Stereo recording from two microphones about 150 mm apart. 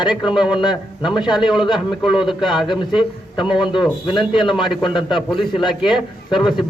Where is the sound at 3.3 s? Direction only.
30° left (ahead or behind).